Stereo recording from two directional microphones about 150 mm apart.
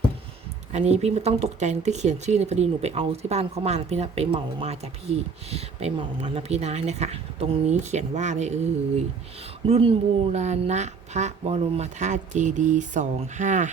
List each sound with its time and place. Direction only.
0.7 s speech: 45° right (ahead or behind)
9.6 s speech: 40° right (ahead or behind)